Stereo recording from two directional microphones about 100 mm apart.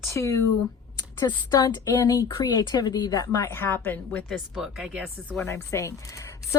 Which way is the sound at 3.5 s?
20° left (ahead or behind).